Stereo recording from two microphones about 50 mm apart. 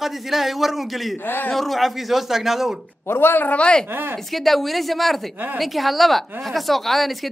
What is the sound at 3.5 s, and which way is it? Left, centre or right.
Speech, left.